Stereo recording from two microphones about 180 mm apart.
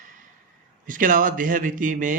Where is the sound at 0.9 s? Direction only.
50° right (ahead or behind).